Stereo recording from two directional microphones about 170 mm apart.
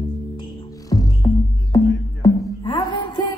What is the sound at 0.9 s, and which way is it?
Music, 20° left (ahead or behind).